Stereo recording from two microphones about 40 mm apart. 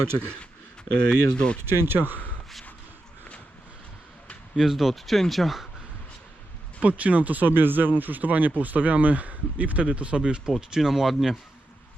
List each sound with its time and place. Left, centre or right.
1.1 s speech: left
1.6 s speech: right
4.5 s speech: centre
6.8 s a man's voice: right
10.5 s speech: centre